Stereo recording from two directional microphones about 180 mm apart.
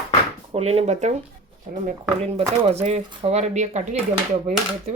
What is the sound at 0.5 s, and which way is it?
Speech, 35° right (ahead or behind).